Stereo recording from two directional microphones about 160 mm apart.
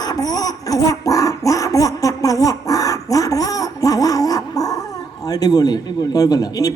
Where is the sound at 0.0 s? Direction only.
25° left (ahead or behind).